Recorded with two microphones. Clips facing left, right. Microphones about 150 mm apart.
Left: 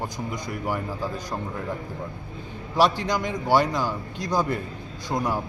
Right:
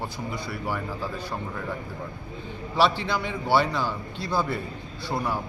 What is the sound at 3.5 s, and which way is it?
Speech, 10° left (ahead or behind).